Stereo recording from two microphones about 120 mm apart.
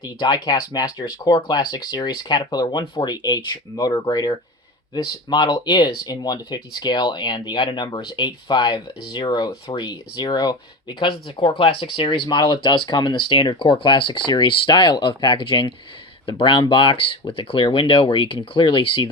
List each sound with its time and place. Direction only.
0.0 s speech: 35° left (ahead or behind)